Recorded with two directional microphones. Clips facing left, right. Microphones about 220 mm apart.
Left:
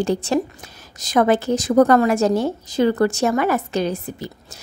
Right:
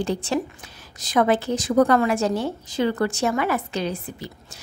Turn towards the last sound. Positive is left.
turn(degrees=40)  # may be behind; listen again after turning